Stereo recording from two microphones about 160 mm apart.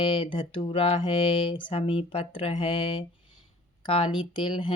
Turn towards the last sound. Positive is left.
turn(degrees=30)  # may be behind; listen again after turning